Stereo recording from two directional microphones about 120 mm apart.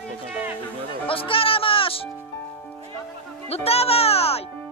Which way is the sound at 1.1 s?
50° left (ahead or behind).